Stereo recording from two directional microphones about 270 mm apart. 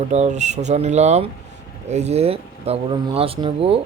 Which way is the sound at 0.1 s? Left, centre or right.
Right.